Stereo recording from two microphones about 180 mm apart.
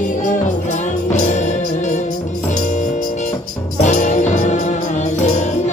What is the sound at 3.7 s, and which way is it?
Music, 40° left (ahead or behind).